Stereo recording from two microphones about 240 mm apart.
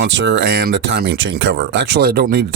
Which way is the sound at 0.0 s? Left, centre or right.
Right.